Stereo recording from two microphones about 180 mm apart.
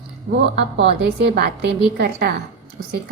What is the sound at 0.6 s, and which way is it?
Speech, 75° right (ahead or behind).